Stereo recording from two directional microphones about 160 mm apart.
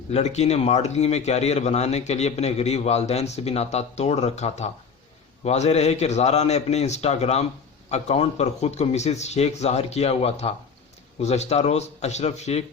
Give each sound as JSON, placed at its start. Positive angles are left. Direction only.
{"t": 0.1, "sound": "a man's voice", "side_deg": 45}